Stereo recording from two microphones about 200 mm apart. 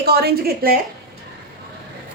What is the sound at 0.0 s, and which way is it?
Speech, 50° right (ahead or behind).